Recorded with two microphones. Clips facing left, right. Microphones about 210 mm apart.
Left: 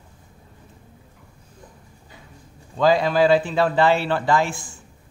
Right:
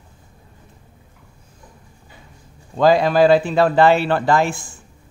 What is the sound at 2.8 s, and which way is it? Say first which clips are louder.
Speech: right 4 dB; 65° right (ahead or behind).